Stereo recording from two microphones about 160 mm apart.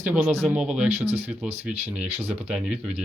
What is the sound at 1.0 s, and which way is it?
Speech, 40° right (ahead or behind).